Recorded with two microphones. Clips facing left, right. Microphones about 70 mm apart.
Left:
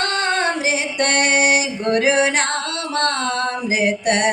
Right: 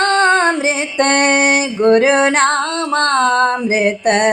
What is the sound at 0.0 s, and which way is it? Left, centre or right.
Female singing, right.